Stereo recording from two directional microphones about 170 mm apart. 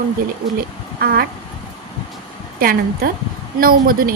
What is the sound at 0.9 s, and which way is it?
Speech, 60° right (ahead or behind).